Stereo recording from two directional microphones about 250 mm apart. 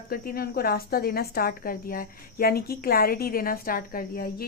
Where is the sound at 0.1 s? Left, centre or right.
Left.